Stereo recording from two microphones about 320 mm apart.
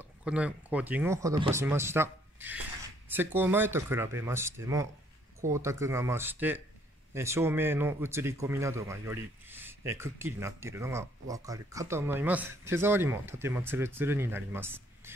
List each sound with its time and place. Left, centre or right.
0.0 s speech: centre